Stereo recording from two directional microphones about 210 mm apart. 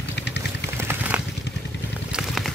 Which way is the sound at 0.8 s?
10° right (ahead or behind).